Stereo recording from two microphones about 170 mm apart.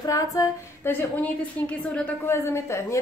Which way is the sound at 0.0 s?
20° left (ahead or behind).